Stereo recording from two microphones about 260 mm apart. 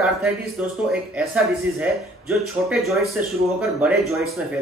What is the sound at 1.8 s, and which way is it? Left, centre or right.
Speech, centre.